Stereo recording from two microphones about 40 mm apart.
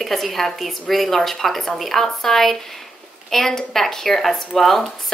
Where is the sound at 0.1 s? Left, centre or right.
Centre.